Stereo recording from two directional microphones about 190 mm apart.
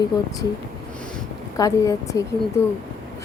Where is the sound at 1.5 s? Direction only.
20° left (ahead or behind).